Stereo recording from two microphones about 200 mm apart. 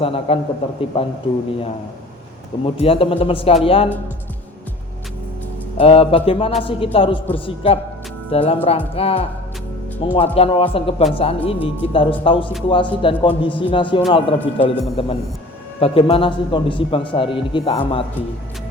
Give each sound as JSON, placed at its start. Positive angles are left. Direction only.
{"t": 0.0, "sound": "a man's voice", "side_deg": 30}
{"t": 2.6, "sound": "a man's voice", "side_deg": 30}
{"t": 5.7, "sound": "a man's voice", "side_deg": 30}